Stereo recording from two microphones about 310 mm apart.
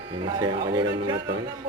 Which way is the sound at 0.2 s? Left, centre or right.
Centre.